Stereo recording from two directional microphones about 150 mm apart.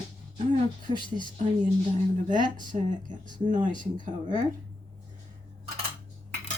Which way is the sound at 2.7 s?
45° right (ahead or behind).